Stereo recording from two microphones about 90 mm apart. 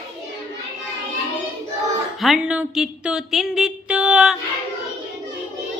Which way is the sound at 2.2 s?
5° right (ahead or behind).